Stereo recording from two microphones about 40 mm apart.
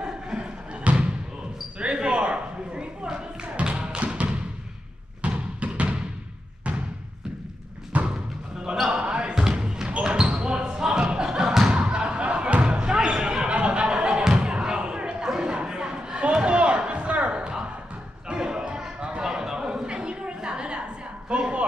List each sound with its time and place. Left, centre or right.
0.0 s thump: right
1.8 s a sound: right
7.9 s thump: right
8.9 s basketball bounce: right
11.2 s thump: centre
11.7 s a sound: right
12.7 s music: centre
14.3 s slam: centre
15.4 s a sound: right